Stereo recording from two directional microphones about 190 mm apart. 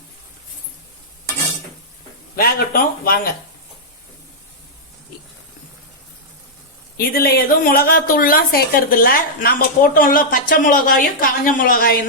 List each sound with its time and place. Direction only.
2.3 s speech: 50° left (ahead or behind)
6.9 s speech: 50° left (ahead or behind)